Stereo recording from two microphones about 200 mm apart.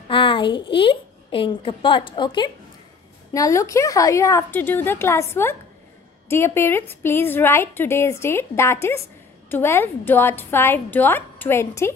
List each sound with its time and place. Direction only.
0.1 s a woman's voice: 25° left (ahead or behind)